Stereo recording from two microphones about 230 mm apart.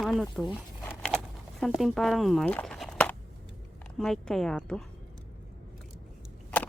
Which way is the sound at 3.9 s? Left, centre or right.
Centre.